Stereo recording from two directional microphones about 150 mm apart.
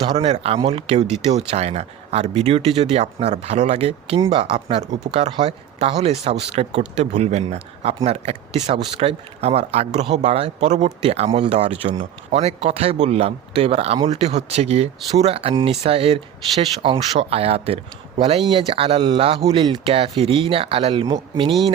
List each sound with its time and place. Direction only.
0.2 s speech: 40° right (ahead or behind)
4.8 s speech: 45° right (ahead or behind)